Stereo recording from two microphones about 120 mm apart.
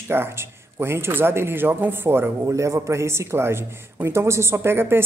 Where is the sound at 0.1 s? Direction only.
20° right (ahead or behind).